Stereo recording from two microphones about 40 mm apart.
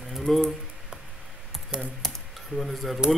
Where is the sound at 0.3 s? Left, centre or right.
Centre.